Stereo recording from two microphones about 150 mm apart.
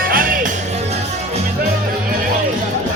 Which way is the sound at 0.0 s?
70° right (ahead or behind).